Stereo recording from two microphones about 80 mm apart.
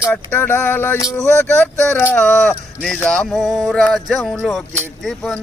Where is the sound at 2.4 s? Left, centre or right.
Centre.